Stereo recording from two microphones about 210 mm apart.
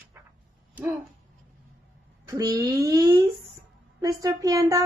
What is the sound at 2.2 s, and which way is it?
Speech, 15° right (ahead or behind).